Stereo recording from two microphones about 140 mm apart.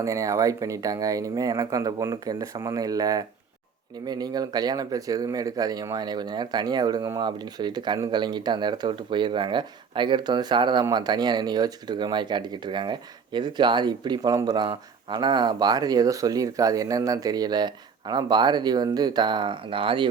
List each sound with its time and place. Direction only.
0.0 s speech: 25° right (ahead or behind); by 20.1 s 40° right (ahead or behind)